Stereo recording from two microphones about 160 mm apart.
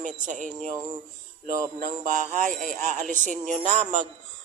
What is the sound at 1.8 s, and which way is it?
A man's voice, 55° right (ahead or behind).